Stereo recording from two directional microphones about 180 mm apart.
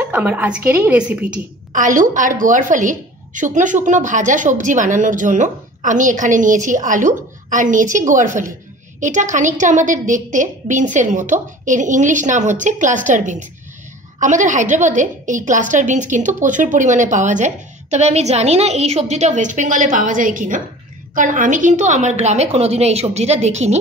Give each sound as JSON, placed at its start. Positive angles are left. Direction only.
{"t": 0.0, "sound": "a woman's voice", "side_deg": -10}
{"t": 1.7, "sound": "a woman's voice", "side_deg": -45}